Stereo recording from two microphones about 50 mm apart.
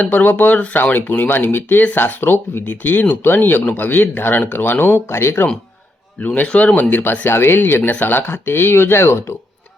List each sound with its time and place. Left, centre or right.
0.0 s speech: left
5.0 s speech: left
6.2 s speech: left
6.5 s speech: left
6.9 s speech: left
7.9 s speech: left